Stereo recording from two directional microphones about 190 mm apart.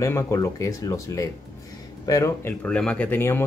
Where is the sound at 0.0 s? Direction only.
15° left (ahead or behind).